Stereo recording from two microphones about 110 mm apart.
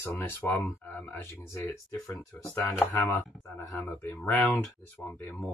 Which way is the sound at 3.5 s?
20° left (ahead or behind).